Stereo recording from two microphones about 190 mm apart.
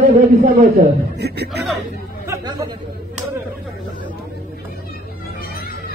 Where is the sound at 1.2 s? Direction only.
60° right (ahead or behind).